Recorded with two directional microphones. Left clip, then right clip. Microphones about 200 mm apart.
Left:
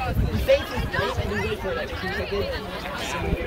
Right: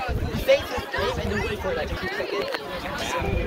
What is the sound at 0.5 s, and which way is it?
Chatter, 20° right (ahead or behind).